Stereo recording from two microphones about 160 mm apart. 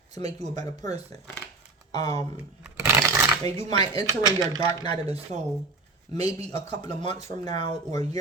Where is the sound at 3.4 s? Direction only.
45° right (ahead or behind).